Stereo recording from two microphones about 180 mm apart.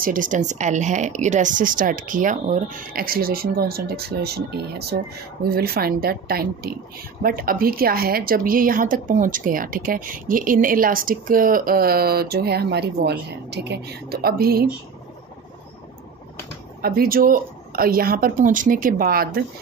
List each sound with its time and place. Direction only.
0.0 s a woman's voice: 50° right (ahead or behind)
16.8 s speech: 55° right (ahead or behind)